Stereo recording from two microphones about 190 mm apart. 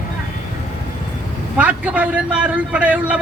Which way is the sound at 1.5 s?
5° right (ahead or behind).